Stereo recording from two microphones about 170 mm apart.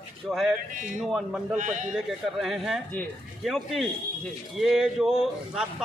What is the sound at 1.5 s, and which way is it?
Speech, 45° right (ahead or behind).